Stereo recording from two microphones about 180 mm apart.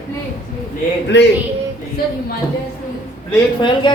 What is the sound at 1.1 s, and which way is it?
Speech, 75° left (ahead or behind).